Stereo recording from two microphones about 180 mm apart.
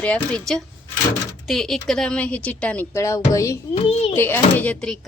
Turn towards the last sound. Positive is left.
turn(degrees=5)  # may be behind; listen again after turning